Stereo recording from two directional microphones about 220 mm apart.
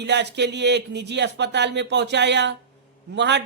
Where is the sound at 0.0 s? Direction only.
50° right (ahead or behind).